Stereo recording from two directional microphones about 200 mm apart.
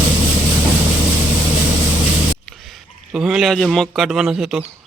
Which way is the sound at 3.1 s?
Centre (ahead or behind).